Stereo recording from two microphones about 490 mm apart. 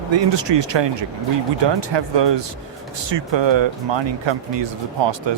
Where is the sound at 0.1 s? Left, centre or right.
Right.